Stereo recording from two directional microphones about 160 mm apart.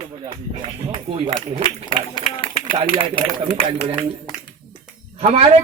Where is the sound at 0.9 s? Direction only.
35° right (ahead or behind).